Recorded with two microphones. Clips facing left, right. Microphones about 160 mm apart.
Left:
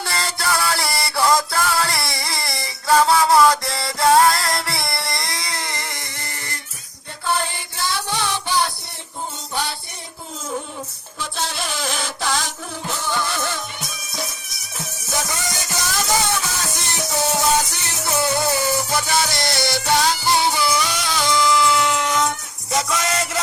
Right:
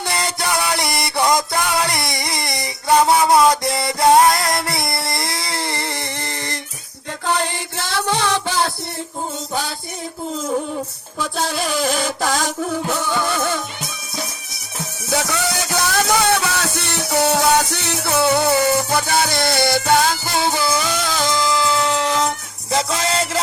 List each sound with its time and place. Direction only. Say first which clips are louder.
0.0 s music: right 2 dB; 20° right (ahead or behind)
2.1 s a sound: right 3 dB; 20° right (ahead or behind)
2.5 s music: right 1 dB; 20° right (ahead or behind)
4.9 s a sound: right 3 dB; 25° right (ahead or behind)
7.3 s chant: right 2 dB; 40° right (ahead or behind)
7.9 s music: right 4 dB; 75° right (ahead or behind)
11.2 s music: right 5 dB; 50° right (ahead or behind)
15.1 s music: right 6 dB; 65° right (ahead or behind); by 23.4 s 30° right (ahead or behind)